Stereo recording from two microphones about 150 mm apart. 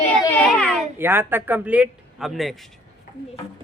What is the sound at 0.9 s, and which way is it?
A man's voice, 15° right (ahead or behind).